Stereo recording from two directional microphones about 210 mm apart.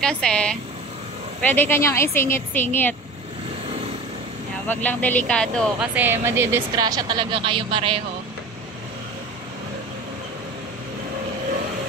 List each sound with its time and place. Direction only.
0.0 s a woman's voice: 5° left (ahead or behind)
4.6 s speech: 5° left (ahead or behind)
5.9 s a woman's voice: 10° right (ahead or behind); by 8.0 s 25° right (ahead or behind)